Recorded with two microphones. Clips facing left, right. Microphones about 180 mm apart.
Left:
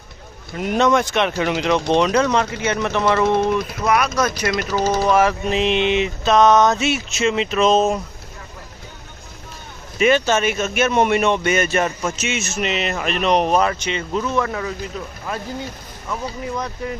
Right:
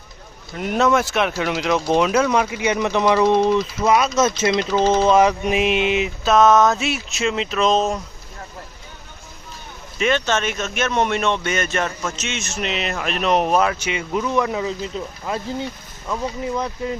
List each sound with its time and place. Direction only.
0.5 s speech: centre (ahead or behind)
10.0 s speech: 5° left (ahead or behind); by 15.4 s 20° right (ahead or behind)
16.6 s speech: 20° right (ahead or behind)